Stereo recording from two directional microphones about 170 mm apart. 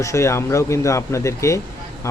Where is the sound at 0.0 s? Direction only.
15° left (ahead or behind).